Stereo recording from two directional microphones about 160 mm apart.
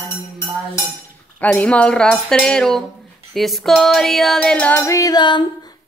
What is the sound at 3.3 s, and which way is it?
Female singing, centre (ahead or behind).